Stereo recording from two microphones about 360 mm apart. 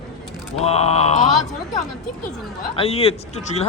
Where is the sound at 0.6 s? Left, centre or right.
Centre.